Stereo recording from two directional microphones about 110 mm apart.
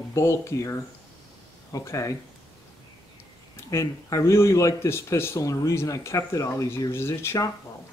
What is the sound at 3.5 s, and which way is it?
Speech, 25° left (ahead or behind).